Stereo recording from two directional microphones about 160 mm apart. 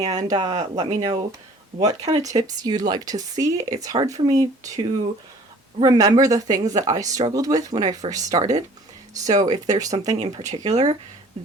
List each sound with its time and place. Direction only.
0.0 s a woman's voice: 25° right (ahead or behind)
0.5 s speech: 40° right (ahead or behind)
1.9 s a woman's voice: 25° right (ahead or behind)
10.2 s speech: 40° right (ahead or behind)